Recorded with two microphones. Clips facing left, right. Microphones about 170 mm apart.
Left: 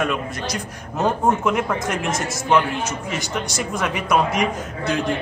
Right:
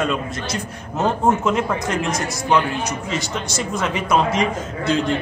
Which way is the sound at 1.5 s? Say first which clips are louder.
Right 1 dB; 20° left (ahead or behind).